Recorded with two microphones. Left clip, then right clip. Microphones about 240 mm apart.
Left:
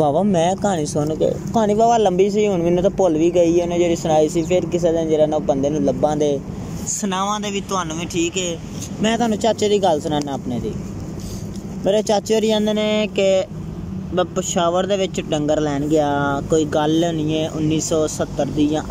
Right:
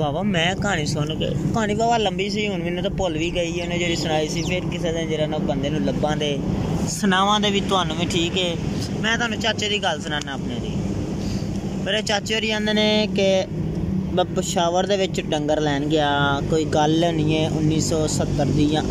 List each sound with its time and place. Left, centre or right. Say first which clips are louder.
0.0 s speech: left 6 dB; centre
9.0 s speech: left 4 dB; centre
11.8 s speech: left 6 dB; centre